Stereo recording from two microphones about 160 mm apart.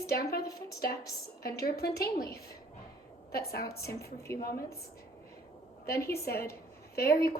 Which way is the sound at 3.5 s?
80° left.